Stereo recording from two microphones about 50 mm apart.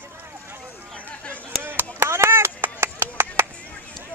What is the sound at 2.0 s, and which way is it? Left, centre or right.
Chop, right.